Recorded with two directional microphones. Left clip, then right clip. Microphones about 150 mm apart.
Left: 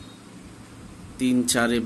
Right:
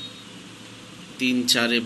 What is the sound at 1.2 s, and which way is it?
Speech, 85° left.